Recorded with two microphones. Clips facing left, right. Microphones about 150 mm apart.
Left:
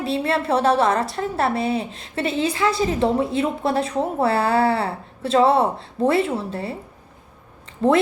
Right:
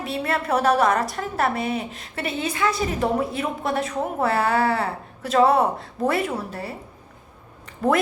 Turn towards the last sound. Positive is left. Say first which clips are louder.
# left 3 dB
turn(degrees=25)  # may be behind; listen again after turning